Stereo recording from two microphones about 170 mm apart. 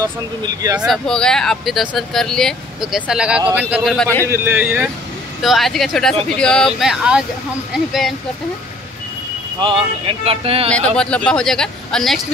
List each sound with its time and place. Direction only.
0.7 s speech: centre (ahead or behind)
4.3 s a man's voice: 10° right (ahead or behind)
9.6 s speech: 30° right (ahead or behind)
11.0 s speech: 5° left (ahead or behind)